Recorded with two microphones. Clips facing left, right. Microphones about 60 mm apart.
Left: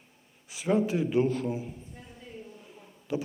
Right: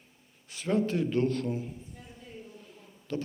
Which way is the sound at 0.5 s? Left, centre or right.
Centre.